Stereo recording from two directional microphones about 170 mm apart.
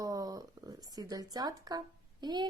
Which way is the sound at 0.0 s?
20° right (ahead or behind).